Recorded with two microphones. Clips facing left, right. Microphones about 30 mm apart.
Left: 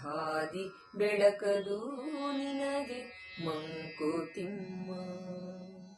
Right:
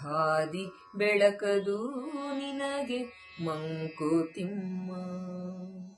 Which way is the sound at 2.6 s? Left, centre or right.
Right.